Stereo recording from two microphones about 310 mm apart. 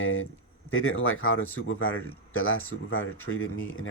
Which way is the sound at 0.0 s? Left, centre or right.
Left.